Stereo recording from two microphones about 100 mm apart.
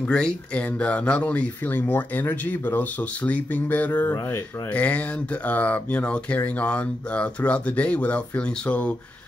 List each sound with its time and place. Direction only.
0.1 s speech: 10° left (ahead or behind)